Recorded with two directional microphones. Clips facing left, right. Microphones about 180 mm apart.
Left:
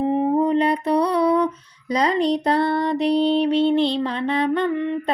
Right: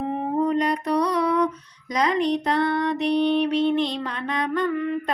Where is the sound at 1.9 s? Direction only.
30° left (ahead or behind).